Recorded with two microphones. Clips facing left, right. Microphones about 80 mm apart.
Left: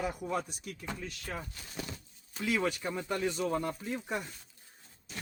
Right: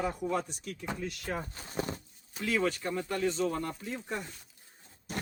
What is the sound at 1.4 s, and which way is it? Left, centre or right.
Speech, right.